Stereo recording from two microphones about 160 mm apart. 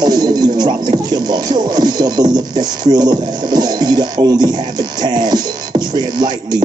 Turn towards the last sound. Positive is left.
turn(degrees=-25)  # may be behind; listen again after turning